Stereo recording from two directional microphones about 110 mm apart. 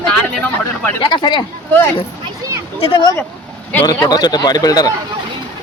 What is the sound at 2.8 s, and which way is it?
Speech, 45° left (ahead or behind).